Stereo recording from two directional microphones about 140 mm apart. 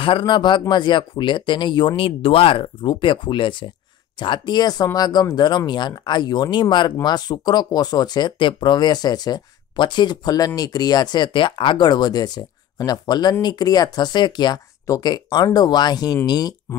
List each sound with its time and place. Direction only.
0.0 s speech: 35° left (ahead or behind)